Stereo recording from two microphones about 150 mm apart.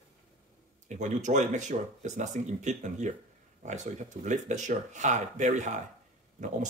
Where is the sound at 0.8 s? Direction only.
55° right (ahead or behind).